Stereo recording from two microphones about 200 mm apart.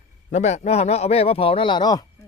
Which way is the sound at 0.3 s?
35° left (ahead or behind).